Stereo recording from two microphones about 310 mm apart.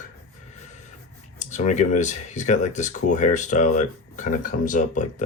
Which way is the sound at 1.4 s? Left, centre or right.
Left.